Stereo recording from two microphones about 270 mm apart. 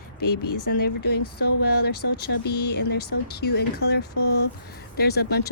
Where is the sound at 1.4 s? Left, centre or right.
Left.